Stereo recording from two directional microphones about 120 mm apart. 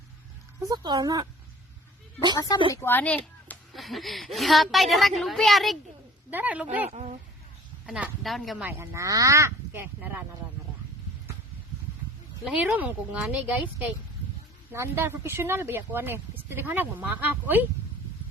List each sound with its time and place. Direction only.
0.6 s speech: 35° right (ahead or behind)
2.3 s a woman's voice: 30° left (ahead or behind)
2.8 s speech: 15° left (ahead or behind)
3.7 s a woman's voice: centre (ahead or behind)
6.3 s speech: 10° right (ahead or behind)
6.9 s speech: 65° right (ahead or behind)
7.9 s a woman's voice: 5° right (ahead or behind)
8.5 s speech: 15° right (ahead or behind)
12.5 s speech: 10° right (ahead or behind)